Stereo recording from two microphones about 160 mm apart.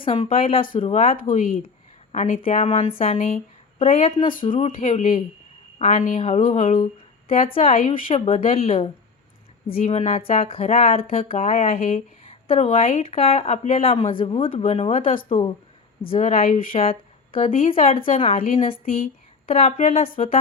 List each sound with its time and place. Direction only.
0.0 s speech: 35° left (ahead or behind)
1.3 s speech: 55° left (ahead or behind)
2.9 s speech: 40° left (ahead or behind)
4.8 s speech: 50° left (ahead or behind)
7.4 s speech: 40° left (ahead or behind)
8.0 s speech: 40° left (ahead or behind)
13.0 s speech: 35° left (ahead or behind)
16.0 s speech: 40° left (ahead or behind)
16.3 s speech: 60° left (ahead or behind)
16.8 s a sound: 35° left (ahead or behind)
17.7 s speech: 35° left (ahead or behind)